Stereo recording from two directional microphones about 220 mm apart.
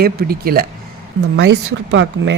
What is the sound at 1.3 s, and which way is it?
Speech, 55° right (ahead or behind).